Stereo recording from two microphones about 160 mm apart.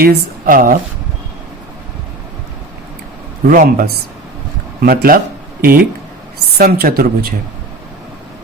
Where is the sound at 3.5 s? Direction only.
60° right (ahead or behind).